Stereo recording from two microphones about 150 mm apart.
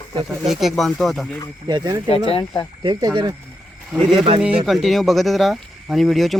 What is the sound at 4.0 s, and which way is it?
Speech, 40° right (ahead or behind).